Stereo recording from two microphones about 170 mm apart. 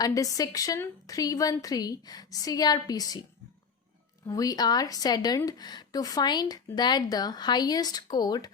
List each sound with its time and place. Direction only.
0.0 s a woman's voice: 20° left (ahead or behind)
4.3 s a woman's voice: 20° left (ahead or behind)